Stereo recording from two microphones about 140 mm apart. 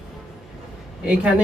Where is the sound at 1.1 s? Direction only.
10° right (ahead or behind).